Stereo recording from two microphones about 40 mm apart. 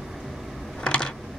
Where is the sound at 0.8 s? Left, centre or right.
Left.